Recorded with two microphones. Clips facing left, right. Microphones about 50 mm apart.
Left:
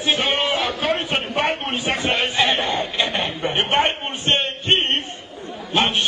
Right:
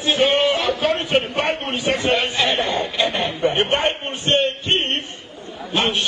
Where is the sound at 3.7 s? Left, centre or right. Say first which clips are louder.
Left 1 dB; left.